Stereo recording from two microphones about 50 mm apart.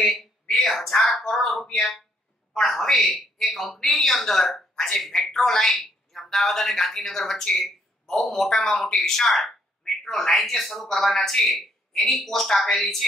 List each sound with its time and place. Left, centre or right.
0.0 s a sound: centre
0.6 s speech: centre
2.5 s a woman's voice: centre